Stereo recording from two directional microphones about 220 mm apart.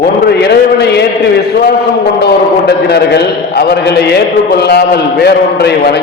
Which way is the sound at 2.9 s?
50° left (ahead or behind).